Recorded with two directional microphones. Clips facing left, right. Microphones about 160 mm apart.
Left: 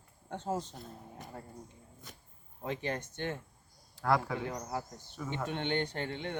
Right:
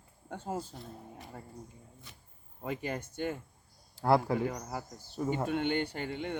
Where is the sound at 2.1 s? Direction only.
45° left (ahead or behind).